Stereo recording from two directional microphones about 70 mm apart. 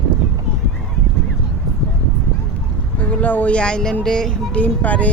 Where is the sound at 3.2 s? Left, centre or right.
Left.